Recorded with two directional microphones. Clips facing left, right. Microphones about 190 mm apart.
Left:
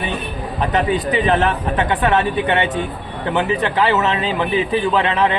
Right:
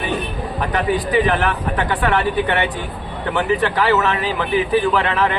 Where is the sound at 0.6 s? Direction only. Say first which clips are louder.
Left 2 dB; 20° left (ahead or behind).